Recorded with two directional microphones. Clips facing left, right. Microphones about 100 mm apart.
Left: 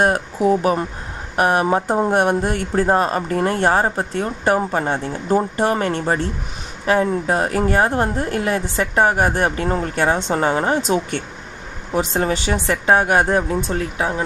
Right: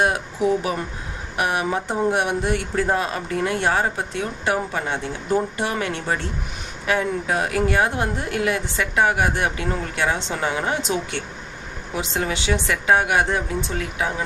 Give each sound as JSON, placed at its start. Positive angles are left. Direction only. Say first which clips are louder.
{"t": 0.0, "sound": "a woman's voice", "louder": "left 4 dB", "side_deg": 45}
{"t": 13.9, "sound": "a woman's voice", "louder": "left 1 dB", "side_deg": 35}